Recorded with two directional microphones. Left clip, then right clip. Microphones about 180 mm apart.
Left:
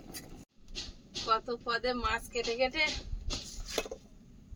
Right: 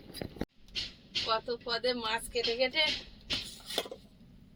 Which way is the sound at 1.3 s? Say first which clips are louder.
Left 3 dB; 5° left (ahead or behind).